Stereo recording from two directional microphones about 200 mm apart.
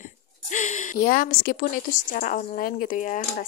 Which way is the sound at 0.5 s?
40° left (ahead or behind).